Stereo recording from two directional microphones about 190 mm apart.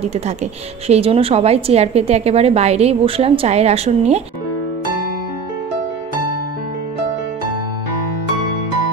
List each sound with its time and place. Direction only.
0.0 s a woman's voice: 35° right (ahead or behind)